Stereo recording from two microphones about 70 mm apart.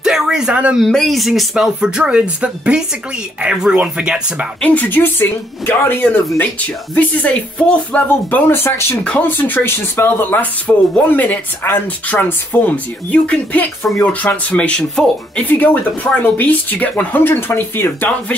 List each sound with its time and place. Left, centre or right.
0.0 s a sound: centre
0.7 s speech: centre
4.6 s speech: left
8.5 s speech: left